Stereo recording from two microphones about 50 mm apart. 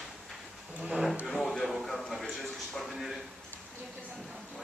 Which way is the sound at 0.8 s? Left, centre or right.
Centre.